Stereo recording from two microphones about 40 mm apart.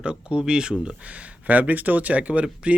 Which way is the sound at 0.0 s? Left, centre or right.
Right.